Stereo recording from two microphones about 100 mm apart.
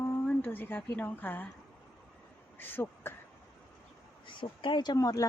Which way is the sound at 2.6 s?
20° left (ahead or behind).